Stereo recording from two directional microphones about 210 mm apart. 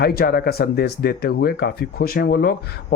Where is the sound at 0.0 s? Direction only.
45° left (ahead or behind).